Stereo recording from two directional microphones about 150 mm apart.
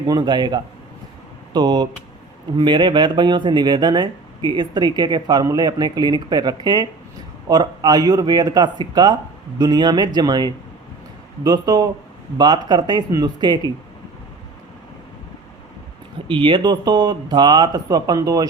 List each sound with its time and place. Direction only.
0.1 s speech: 30° right (ahead or behind)
16.3 s speech: 35° right (ahead or behind)